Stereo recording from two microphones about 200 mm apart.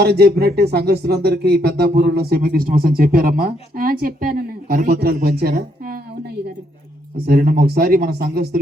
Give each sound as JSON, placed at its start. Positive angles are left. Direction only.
{"t": 0.0, "sound": "a woman's voice", "side_deg": -55}